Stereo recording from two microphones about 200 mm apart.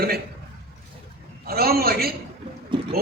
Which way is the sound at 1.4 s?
50° right (ahead or behind).